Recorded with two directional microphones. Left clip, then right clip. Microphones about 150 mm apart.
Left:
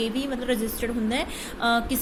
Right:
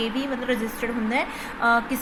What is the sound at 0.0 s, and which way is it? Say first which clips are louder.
Speech: right 1 dB; 45° left (ahead or behind).